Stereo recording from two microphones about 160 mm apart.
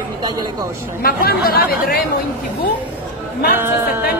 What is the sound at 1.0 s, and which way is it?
Speech, 70° left (ahead or behind).